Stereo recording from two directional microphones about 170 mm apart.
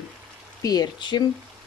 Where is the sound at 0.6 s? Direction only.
25° left (ahead or behind).